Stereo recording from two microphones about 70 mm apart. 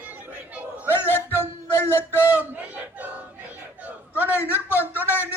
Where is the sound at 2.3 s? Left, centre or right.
Right.